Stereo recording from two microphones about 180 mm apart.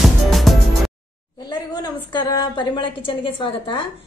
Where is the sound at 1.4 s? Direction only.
25° left (ahead or behind).